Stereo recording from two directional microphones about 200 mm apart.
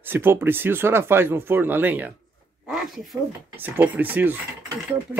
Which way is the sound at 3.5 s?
10° right (ahead or behind).